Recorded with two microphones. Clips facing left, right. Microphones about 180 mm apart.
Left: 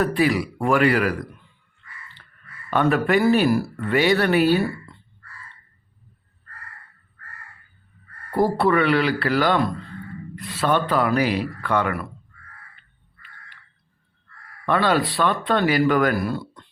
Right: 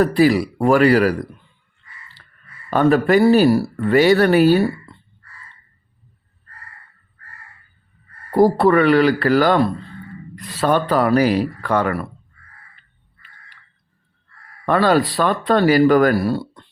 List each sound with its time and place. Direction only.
0.0 s speech: 35° right (ahead or behind)
2.6 s speech: 40° right (ahead or behind)
8.3 s speech: 40° right (ahead or behind)
14.6 s speech: 40° right (ahead or behind)